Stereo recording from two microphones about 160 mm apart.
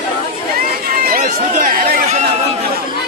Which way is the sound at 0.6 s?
65° right (ahead or behind).